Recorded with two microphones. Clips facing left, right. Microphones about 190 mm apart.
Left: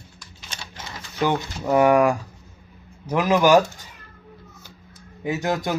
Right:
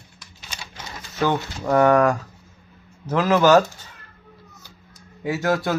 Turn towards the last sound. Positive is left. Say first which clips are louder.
# right 2 dB
turn(degrees=15)  # may be behind; listen again after turning